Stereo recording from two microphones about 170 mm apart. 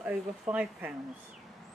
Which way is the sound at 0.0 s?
5° right (ahead or behind).